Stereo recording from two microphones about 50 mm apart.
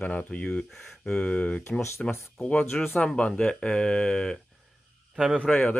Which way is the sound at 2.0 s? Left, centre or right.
Centre.